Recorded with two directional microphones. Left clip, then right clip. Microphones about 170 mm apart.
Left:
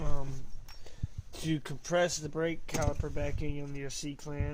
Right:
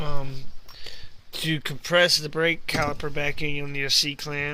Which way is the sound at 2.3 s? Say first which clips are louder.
Right 10 dB; 5° right (ahead or behind).